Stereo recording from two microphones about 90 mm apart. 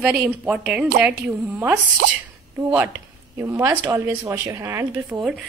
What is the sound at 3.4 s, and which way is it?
A woman's voice, 25° right (ahead or behind).